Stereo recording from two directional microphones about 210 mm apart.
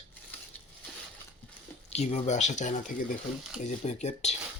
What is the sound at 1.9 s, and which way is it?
Speech, 30° left (ahead or behind).